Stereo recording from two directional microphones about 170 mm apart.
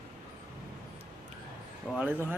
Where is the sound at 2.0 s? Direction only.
10° right (ahead or behind).